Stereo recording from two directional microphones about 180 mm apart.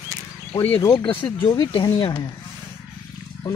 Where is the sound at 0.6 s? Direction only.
10° left (ahead or behind).